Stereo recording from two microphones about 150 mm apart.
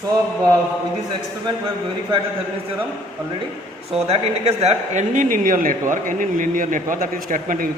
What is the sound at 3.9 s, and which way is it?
Speech, 45° right (ahead or behind).